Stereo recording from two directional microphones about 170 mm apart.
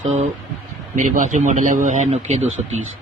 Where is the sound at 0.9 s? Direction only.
45° right (ahead or behind).